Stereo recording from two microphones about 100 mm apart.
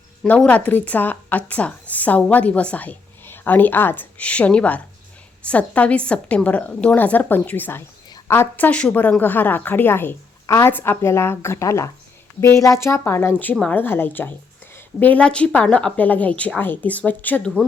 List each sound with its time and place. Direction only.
0.2 s speech: 10° left (ahead or behind)
10.4 s speech: 30° left (ahead or behind)
10.7 s speech: 20° left (ahead or behind)